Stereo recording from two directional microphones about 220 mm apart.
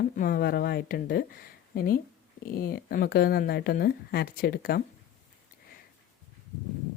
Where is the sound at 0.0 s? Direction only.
40° left (ahead or behind).